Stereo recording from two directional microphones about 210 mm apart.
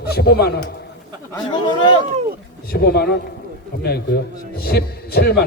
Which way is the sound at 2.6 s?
50° left (ahead or behind).